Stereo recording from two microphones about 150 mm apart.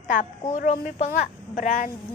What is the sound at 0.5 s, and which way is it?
A woman's voice, 60° left (ahead or behind).